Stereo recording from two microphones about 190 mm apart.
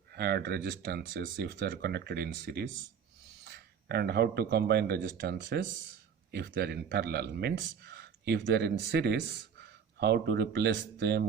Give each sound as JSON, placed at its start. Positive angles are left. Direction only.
{"t": 0.1, "sound": "speech", "side_deg": -60}